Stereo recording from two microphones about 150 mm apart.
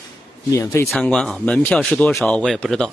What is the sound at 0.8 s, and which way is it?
A man's voice, 5° left (ahead or behind).